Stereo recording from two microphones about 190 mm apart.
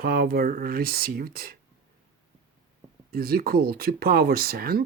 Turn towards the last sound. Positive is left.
turn(degrees=-50)  # may be behind; listen again after turning